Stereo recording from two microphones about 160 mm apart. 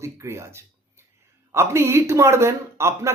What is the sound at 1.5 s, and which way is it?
Speech, 15° right (ahead or behind).